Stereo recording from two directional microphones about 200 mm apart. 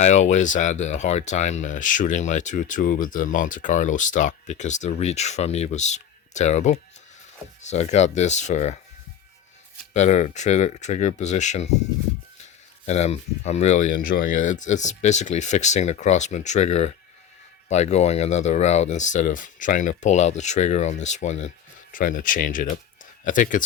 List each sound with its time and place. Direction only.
0.0 s speech: 35° left (ahead or behind)
9.9 s speech: 35° left (ahead or behind)
12.8 s speech: 35° left (ahead or behind)